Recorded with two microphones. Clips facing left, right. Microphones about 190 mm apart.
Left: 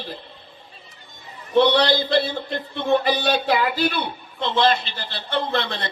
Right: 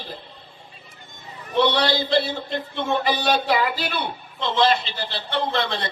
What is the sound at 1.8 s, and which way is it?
Speech, 55° left (ahead or behind).